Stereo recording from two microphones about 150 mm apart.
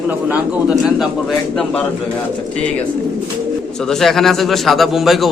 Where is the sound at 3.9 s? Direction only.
Centre (ahead or behind).